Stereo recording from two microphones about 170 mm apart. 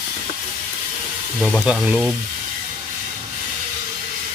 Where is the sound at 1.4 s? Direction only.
5° right (ahead or behind).